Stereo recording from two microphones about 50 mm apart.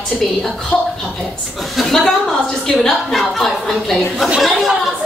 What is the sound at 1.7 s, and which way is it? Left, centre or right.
A woman's voice, centre.